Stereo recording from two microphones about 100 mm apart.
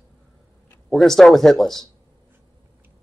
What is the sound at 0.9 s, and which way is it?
Speech, centre (ahead or behind).